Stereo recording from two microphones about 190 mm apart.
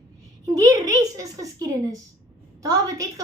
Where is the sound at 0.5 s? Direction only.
20° right (ahead or behind).